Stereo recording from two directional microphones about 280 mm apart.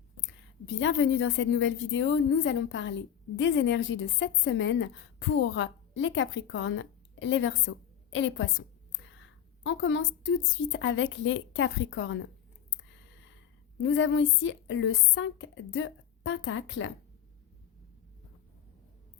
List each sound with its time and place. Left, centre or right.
0.2 s a woman's voice: left
9.6 s a woman's voice: left
13.8 s a woman's voice: left